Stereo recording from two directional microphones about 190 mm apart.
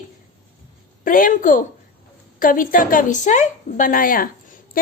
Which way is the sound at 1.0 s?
45° left (ahead or behind).